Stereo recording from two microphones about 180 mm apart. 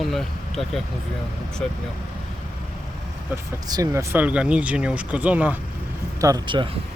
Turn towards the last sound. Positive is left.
turn(degrees=-20)  # may be behind; listen again after turning